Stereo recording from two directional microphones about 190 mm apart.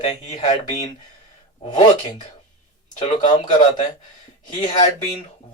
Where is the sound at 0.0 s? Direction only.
40° left (ahead or behind).